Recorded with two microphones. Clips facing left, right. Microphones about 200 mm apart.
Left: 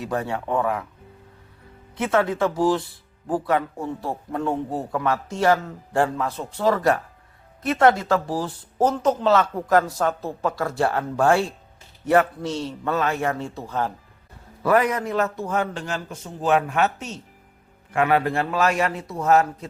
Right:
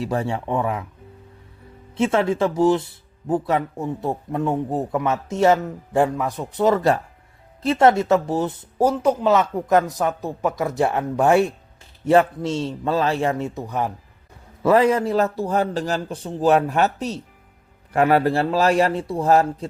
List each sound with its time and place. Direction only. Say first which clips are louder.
0.0 s a man's voice: right 2 dB; 25° right (ahead or behind)
2.0 s a man's voice: right 2 dB; 25° right (ahead or behind)
8.8 s a man's voice: right 2 dB; 10° right (ahead or behind)
14.6 s speech: right 4 dB; 25° right (ahead or behind)